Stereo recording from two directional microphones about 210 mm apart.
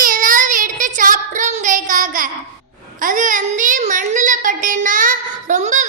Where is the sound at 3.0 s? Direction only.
40° right (ahead or behind).